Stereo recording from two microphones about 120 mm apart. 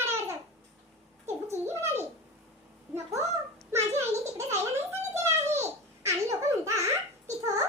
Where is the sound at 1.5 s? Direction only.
20° right (ahead or behind).